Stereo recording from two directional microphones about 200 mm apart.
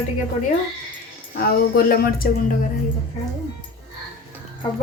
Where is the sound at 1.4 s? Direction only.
45° left (ahead or behind).